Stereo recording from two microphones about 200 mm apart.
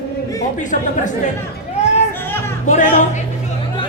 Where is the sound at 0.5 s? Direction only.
40° left (ahead or behind).